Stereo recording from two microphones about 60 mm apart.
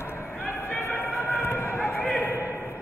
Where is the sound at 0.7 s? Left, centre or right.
Left.